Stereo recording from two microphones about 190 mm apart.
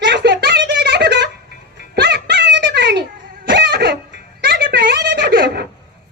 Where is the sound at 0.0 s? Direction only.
65° right (ahead or behind).